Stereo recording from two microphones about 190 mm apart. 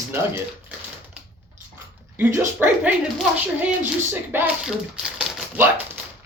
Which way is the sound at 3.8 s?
10° right (ahead or behind).